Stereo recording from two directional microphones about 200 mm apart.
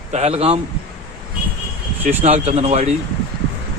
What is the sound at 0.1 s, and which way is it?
Speech, 35° right (ahead or behind).